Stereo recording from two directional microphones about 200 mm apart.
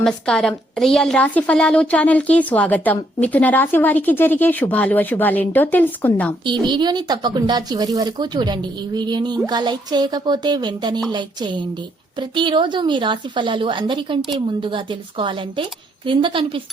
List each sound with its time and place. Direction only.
0.0 s a woman's voice: 5° left (ahead or behind)
6.4 s speech: 25° right (ahead or behind)